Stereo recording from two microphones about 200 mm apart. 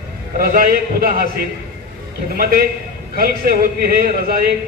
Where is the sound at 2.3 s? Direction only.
50° right (ahead or behind).